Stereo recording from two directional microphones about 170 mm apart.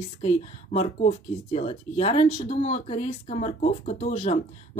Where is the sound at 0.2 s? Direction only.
40° left (ahead or behind).